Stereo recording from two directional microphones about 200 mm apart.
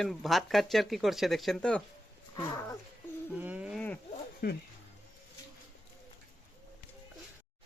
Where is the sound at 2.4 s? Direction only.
15° left (ahead or behind).